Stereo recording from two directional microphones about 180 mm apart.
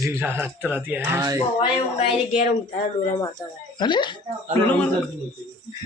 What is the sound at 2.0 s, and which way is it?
Music, 40° left (ahead or behind).